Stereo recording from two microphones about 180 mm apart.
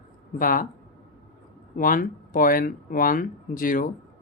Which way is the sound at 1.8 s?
50° left (ahead or behind).